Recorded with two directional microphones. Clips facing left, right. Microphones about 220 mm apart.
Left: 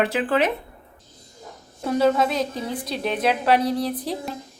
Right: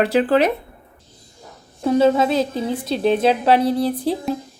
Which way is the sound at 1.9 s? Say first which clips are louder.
Right 4 dB; 25° right (ahead or behind).